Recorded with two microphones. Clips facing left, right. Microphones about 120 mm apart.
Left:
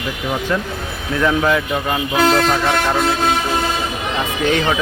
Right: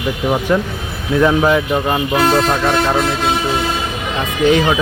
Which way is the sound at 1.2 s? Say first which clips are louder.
Right 3 dB; 15° right (ahead or behind).